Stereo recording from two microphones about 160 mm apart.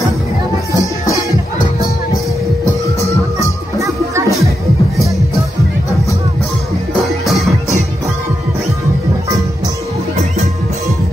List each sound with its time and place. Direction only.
0.7 s music: 20° left (ahead or behind)
3.3 s music: 20° left (ahead or behind)
3.8 s music: 20° right (ahead or behind)